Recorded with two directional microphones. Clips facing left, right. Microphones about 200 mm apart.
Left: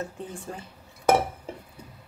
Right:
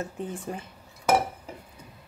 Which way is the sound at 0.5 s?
15° right (ahead or behind).